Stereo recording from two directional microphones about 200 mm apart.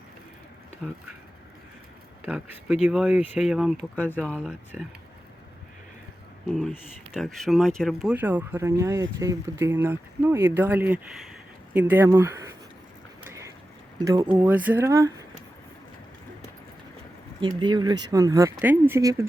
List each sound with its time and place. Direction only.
0.8 s speech: centre (ahead or behind)
2.2 s speech: 5° right (ahead or behind)
4.3 s speech: 5° right (ahead or behind)
6.5 s speech: centre (ahead or behind)
13.2 s a sound: 15° right (ahead or behind)
14.0 s speech: 15° right (ahead or behind)
17.4 s speech: 20° right (ahead or behind)